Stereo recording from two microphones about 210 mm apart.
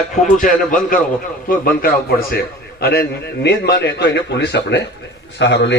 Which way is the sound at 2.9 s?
50° left (ahead or behind).